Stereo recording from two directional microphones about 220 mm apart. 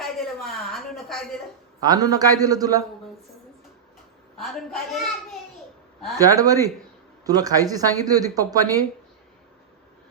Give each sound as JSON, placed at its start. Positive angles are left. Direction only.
{"t": 0.0, "sound": "speech", "side_deg": 0}
{"t": 1.9, "sound": "speech", "side_deg": -15}
{"t": 4.4, "sound": "a child's voice", "side_deg": 0}
{"t": 6.1, "sound": "speech", "side_deg": -15}